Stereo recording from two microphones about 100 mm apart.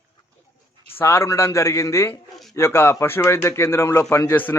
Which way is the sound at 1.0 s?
25° left (ahead or behind).